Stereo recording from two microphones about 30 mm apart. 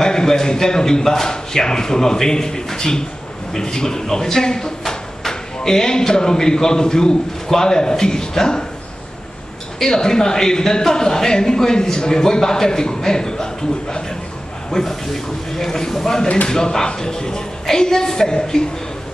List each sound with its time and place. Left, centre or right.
0.0 s speech: left
9.8 s speech: left